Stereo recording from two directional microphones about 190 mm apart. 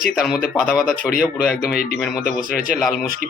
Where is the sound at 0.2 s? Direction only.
Centre (ahead or behind).